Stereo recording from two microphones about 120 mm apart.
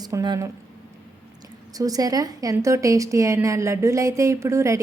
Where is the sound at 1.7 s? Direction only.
30° right (ahead or behind).